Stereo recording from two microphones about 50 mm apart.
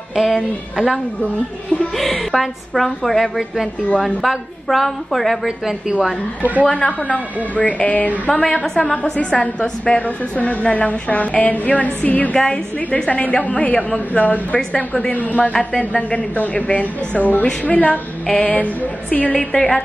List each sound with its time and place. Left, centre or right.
0.1 s a woman's voice: centre
2.0 s a woman's voice: centre
6.6 s a woman's voice: left
8.3 s a woman's voice: centre; by 19.3 s left
19.3 s a woman's voice: centre